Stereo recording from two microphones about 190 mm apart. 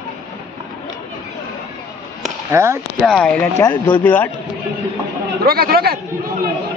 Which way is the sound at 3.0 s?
Centre (ahead or behind).